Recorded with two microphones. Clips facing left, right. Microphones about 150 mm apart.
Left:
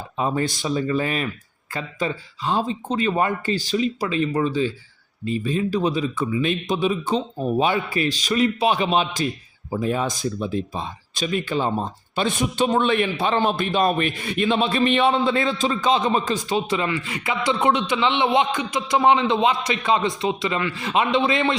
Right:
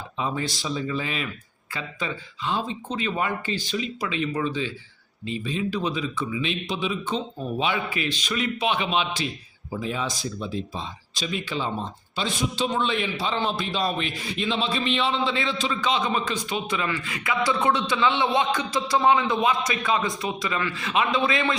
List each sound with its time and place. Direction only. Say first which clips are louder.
0.2 s a man's voice: left 5 dB; 50° left (ahead or behind); by 21.5 s 30° left (ahead or behind)